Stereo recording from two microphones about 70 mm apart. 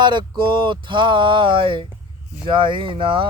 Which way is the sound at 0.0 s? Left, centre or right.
Right.